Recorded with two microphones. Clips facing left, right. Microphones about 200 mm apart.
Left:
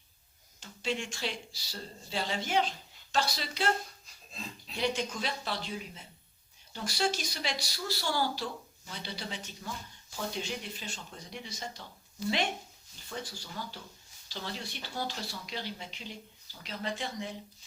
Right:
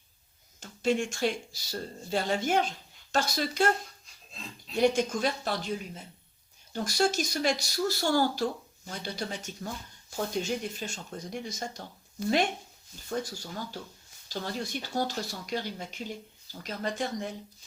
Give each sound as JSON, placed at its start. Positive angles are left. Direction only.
{"t": 0.6, "sound": "speech", "side_deg": -50}
{"t": 4.8, "sound": "speech", "side_deg": -45}
{"t": 13.1, "sound": "speech", "side_deg": -45}